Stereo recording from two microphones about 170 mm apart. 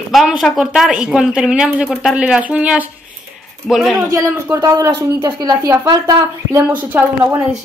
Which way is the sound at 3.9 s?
20° right (ahead or behind).